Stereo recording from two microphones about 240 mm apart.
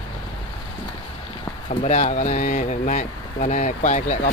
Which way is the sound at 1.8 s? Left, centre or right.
Left.